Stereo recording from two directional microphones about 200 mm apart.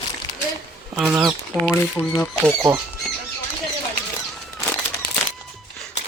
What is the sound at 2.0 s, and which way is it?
Speech, 10° left (ahead or behind).